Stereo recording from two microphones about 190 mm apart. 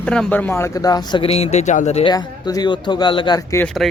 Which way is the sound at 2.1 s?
20° left (ahead or behind).